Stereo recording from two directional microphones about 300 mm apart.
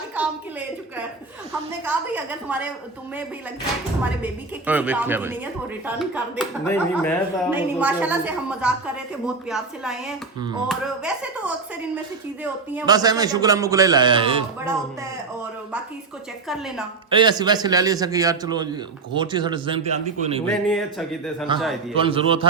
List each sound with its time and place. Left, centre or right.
1.8 s speech: centre
4.2 s speech: centre
7.5 s a man's voice: centre
16.5 s speech: centre
17.1 s a man's voice: centre
20.5 s speech: centre
21.5 s a man's voice: centre